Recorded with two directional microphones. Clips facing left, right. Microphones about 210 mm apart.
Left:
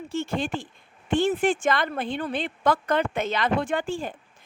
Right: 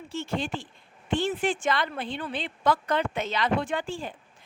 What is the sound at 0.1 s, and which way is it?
A woman's voice, 50° left (ahead or behind).